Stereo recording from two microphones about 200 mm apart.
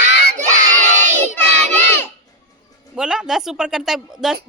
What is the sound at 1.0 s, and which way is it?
Crowd, 35° right (ahead or behind).